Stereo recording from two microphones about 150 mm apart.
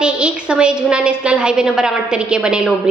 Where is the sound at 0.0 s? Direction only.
5° right (ahead or behind).